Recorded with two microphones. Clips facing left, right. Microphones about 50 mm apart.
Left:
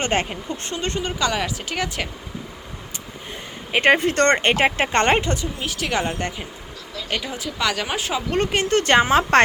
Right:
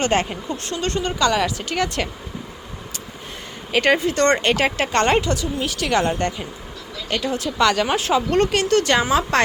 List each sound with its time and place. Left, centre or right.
0.0 s speech: left; by 2.0 s centre
3.7 s a woman's voice: left
4.4 s speech: left
5.5 s speech: centre
8.4 s a woman's voice: left